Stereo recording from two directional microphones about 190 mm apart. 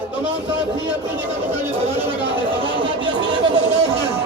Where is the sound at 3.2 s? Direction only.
25° right (ahead or behind).